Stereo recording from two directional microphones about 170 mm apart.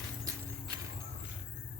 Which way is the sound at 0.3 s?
20° right (ahead or behind).